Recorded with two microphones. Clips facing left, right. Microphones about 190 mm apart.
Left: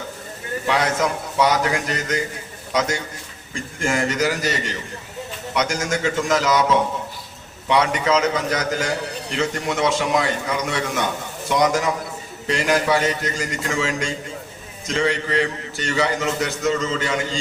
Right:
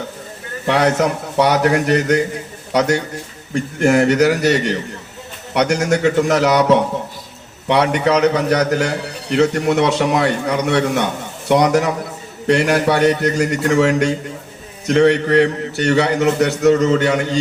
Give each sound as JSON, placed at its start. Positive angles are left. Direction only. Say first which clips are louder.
{"t": 0.7, "sound": "a man's voice", "louder": "right 6 dB", "side_deg": -65}